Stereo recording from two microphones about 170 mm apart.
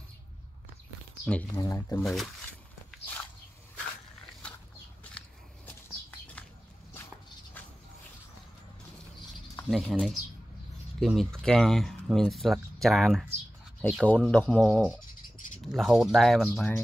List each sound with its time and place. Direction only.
1.3 s speech: 5° left (ahead or behind)
1.6 s speech: 20° left (ahead or behind)
2.0 s speech: centre (ahead or behind)
9.7 s speech: centre (ahead or behind)
16.4 s speech: 10° left (ahead or behind)